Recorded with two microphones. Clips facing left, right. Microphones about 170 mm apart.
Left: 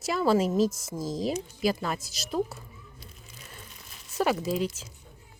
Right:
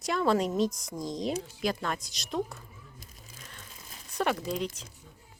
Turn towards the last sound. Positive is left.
turn(degrees=5)  # may be behind; listen again after turning